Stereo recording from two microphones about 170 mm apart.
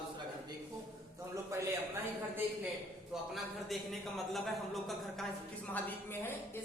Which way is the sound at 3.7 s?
Centre (ahead or behind).